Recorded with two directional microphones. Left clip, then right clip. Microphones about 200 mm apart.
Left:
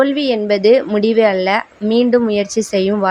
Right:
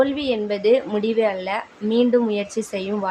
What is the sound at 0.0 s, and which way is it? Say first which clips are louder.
A woman's voice: left 5 dB; 30° left (ahead or behind).